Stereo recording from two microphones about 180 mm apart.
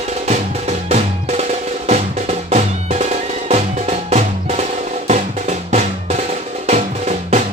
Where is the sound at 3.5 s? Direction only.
40° right (ahead or behind).